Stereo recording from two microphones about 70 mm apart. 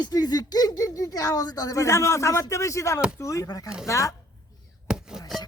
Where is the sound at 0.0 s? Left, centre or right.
Left.